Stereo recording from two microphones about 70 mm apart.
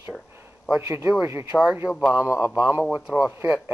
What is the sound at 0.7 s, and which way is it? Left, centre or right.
Speech, right.